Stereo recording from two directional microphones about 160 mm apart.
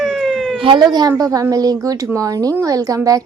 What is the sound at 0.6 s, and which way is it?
A woman's voice, 30° right (ahead or behind).